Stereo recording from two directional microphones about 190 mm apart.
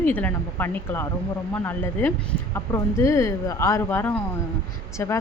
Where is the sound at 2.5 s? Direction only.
15° left (ahead or behind).